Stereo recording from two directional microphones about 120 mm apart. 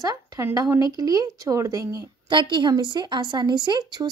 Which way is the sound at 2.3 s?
45° right (ahead or behind).